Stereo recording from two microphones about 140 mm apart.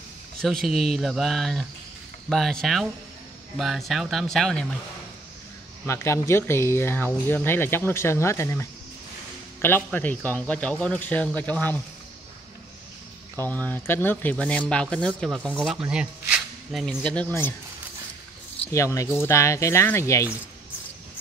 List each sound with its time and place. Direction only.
0.4 s speech: centre (ahead or behind)
5.9 s speech: 20° left (ahead or behind)
13.4 s speech: 10° left (ahead or behind)
15.8 s speech: 5° right (ahead or behind); by 17.6 s 15° left (ahead or behind)
18.7 s speech: 20° left (ahead or behind)